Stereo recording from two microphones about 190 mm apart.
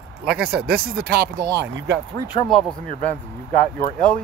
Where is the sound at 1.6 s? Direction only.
65° right (ahead or behind).